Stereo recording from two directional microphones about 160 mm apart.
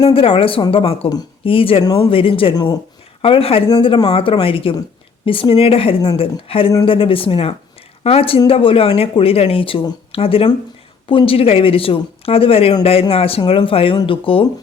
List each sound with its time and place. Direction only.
0.0 s speech: 35° left (ahead or behind)